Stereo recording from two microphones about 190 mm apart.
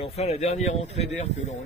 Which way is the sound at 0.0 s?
35° left (ahead or behind).